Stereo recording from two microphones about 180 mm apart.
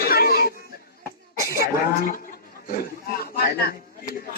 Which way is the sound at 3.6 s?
55° left (ahead or behind).